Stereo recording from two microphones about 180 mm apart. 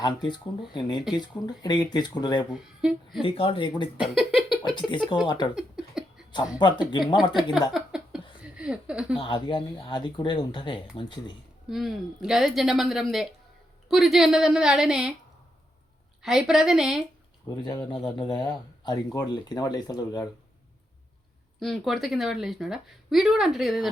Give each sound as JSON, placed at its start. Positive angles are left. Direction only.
{"t": 0.0, "sound": "speech", "side_deg": 25}
{"t": 2.5, "sound": "a woman's voice", "side_deg": -5}
{"t": 3.2, "sound": "speech", "side_deg": 30}
{"t": 4.0, "sound": "speech", "side_deg": 0}
{"t": 4.6, "sound": "speech", "side_deg": 25}
{"t": 5.5, "sound": "a sound", "side_deg": -5}
{"t": 6.6, "sound": "speech", "side_deg": 25}
{"t": 7.7, "sound": "a sound", "side_deg": -5}
{"t": 9.1, "sound": "speech", "side_deg": 25}
{"t": 11.7, "sound": "a woman's voice", "side_deg": 0}
{"t": 16.2, "sound": "a woman's voice", "side_deg": 0}
{"t": 17.5, "sound": "speech", "side_deg": 20}
{"t": 21.6, "sound": "a woman's voice", "side_deg": 0}